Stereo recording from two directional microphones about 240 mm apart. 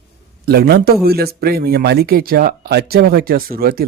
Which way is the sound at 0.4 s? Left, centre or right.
Right.